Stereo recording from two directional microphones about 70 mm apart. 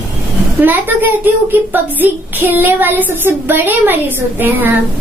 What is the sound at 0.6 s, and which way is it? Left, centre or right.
A child's voice, right.